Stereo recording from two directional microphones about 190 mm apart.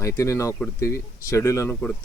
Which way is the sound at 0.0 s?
15° left (ahead or behind).